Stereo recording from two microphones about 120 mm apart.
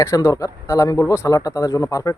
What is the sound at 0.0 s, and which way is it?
Speech, 30° left (ahead or behind).